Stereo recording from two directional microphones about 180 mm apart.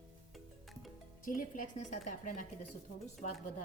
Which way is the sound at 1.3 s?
50° left (ahead or behind).